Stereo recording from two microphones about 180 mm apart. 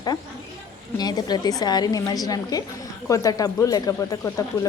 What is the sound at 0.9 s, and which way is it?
Speech, 20° left (ahead or behind).